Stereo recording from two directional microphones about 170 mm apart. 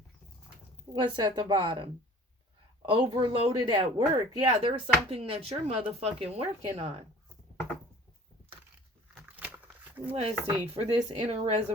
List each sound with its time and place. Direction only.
0.9 s a woman's voice: 30° right (ahead or behind)
9.3 s a sound: 10° right (ahead or behind)
10.1 s speech: 35° right (ahead or behind)